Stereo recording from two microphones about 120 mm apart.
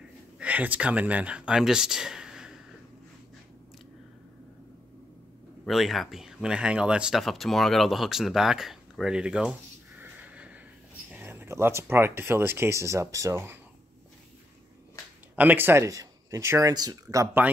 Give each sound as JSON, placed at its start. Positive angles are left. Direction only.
{"t": 0.4, "sound": "speech", "side_deg": -10}
{"t": 5.7, "sound": "speech", "side_deg": 0}
{"t": 15.3, "sound": "speech", "side_deg": -15}